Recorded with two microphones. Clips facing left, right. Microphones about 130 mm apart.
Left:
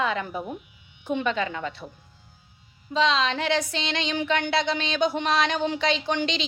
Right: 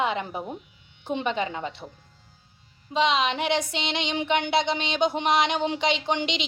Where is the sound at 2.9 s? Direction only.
20° right (ahead or behind).